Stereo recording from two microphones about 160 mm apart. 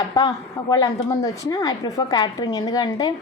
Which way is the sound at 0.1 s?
25° left (ahead or behind).